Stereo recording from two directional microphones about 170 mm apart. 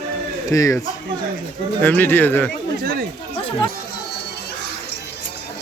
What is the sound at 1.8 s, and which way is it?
Speech, 10° left (ahead or behind).